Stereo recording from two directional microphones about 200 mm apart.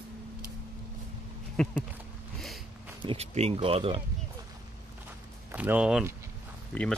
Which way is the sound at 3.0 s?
30° right (ahead or behind).